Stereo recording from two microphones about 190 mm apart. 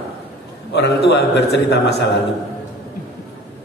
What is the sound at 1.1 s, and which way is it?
Speech, 60° left (ahead or behind).